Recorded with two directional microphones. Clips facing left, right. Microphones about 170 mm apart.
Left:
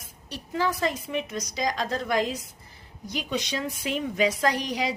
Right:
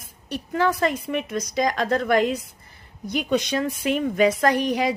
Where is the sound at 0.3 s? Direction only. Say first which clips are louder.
Right 5 dB; 60° right (ahead or behind).